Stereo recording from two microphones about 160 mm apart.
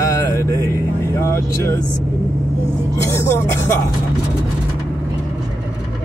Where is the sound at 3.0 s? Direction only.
15° left (ahead or behind).